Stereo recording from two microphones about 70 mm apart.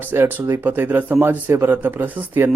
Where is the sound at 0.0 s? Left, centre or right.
Right.